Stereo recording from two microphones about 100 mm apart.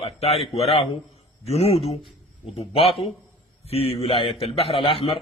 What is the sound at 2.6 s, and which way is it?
Speech, 70° left (ahead or behind).